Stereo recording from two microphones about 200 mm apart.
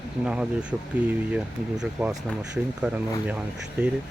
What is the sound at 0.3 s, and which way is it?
Speech, 5° right (ahead or behind).